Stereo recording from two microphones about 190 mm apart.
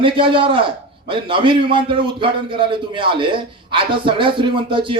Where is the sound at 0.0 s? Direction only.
25° right (ahead or behind).